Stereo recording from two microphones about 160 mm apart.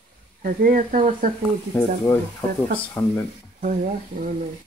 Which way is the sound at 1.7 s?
15° left (ahead or behind).